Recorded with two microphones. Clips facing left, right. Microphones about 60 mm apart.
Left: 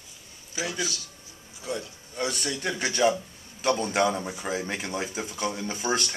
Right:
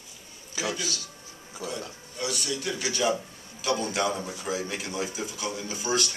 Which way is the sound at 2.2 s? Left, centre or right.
Left.